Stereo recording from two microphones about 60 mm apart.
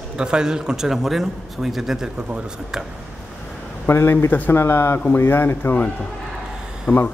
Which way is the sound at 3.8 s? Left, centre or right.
Left.